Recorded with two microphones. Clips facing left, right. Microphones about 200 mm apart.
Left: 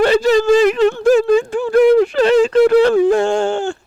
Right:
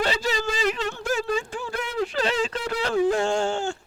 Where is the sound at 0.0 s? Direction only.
60° left (ahead or behind).